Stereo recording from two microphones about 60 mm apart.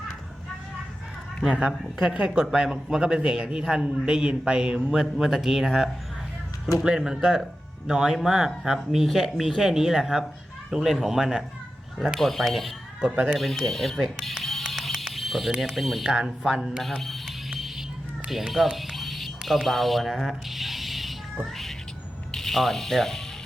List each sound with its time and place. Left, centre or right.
1.5 s a woman's voice: centre
13.3 s music: centre
15.7 s speech: centre
16.0 s speech: centre
17.0 s music: centre
18.3 s a sound: centre
22.3 s speech: centre